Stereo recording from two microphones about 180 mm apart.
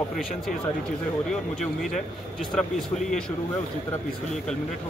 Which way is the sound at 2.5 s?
Centre (ahead or behind).